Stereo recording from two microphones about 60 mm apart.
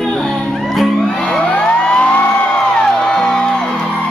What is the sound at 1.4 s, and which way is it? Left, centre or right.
Music, centre.